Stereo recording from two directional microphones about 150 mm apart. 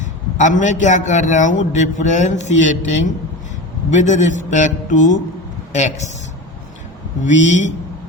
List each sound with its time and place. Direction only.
0.0 s a man's voice: 55° left (ahead or behind)
7.2 s speech: 55° left (ahead or behind)